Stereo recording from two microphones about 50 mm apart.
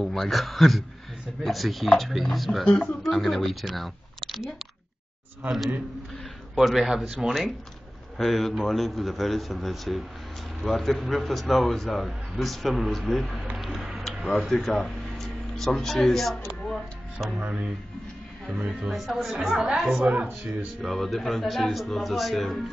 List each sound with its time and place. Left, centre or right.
0.0 s a man's voice: centre
2.6 s a man's voice: centre
3.0 s speech: centre
6.5 s a man's voice: centre
13.6 s tick-tock: centre
14.5 s speech: centre
17.4 s speech: right
18.9 s a man's voice: centre
20.0 s speech: right
20.8 s a man's voice: centre